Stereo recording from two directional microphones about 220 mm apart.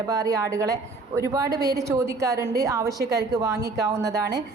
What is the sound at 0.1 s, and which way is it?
A woman's voice, 15° right (ahead or behind).